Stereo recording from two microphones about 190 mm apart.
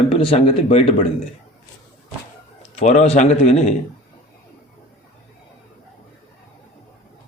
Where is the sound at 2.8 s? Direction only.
35° left (ahead or behind).